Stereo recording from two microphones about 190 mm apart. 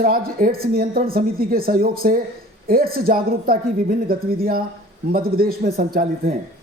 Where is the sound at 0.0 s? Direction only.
45° right (ahead or behind).